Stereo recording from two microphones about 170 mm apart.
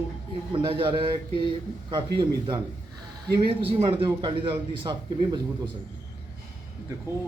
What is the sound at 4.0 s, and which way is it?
Speech, 25° right (ahead or behind).